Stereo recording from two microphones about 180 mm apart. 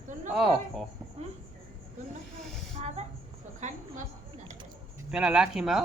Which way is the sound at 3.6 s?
40° right (ahead or behind).